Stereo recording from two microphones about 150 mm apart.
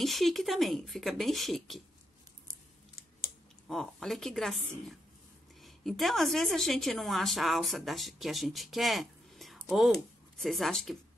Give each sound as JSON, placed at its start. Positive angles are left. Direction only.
{"t": 0.0, "sound": "a woman's voice", "side_deg": 0}
{"t": 3.6, "sound": "a woman's voice", "side_deg": 0}
{"t": 5.6, "sound": "a woman's voice", "side_deg": 0}